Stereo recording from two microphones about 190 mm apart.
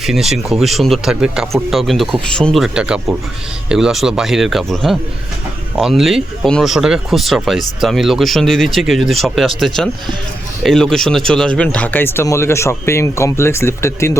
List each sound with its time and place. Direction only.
0.0 s speech: centre (ahead or behind); by 14.2 s 15° left (ahead or behind)